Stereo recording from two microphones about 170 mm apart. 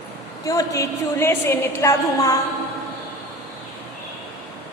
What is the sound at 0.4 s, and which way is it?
A woman's voice, 20° left (ahead or behind).